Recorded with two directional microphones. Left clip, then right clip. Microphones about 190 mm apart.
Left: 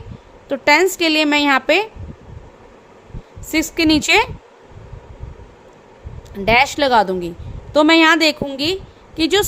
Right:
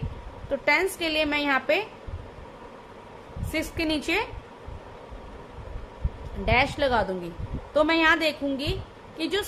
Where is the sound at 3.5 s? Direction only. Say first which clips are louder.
Left 12 dB; 60° left (ahead or behind).